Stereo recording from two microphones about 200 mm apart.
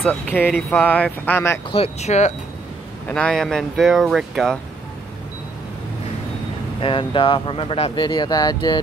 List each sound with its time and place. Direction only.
0.0 s speech: 10° left (ahead or behind)
1.7 s speech: 30° left (ahead or behind)
3.1 s speech: 5° left (ahead or behind)
6.8 s speech: 25° left (ahead or behind)